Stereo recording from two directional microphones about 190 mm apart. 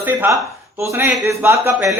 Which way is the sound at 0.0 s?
10° right (ahead or behind).